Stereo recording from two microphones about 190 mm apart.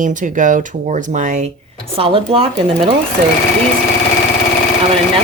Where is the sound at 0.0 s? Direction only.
45° right (ahead or behind).